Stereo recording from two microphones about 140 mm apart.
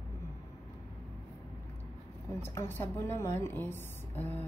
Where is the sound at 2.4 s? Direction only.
15° left (ahead or behind).